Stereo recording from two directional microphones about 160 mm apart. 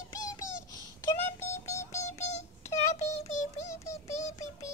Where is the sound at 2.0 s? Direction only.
45° left (ahead or behind).